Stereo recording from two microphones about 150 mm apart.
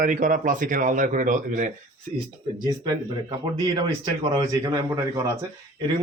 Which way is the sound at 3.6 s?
30° right (ahead or behind).